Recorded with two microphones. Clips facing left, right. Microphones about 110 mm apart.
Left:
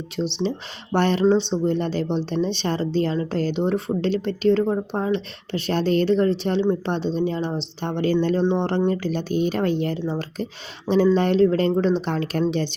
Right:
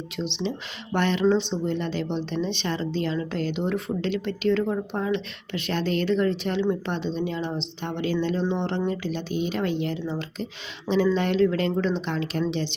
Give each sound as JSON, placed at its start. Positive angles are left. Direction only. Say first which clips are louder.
{"t": 0.2, "sound": "a woman's voice", "louder": "left 5 dB", "side_deg": 35}